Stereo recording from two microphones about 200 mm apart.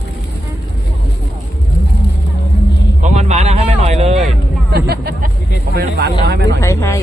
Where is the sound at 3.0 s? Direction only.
35° right (ahead or behind).